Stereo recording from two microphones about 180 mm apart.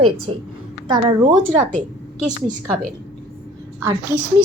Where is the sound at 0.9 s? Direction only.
20° right (ahead or behind).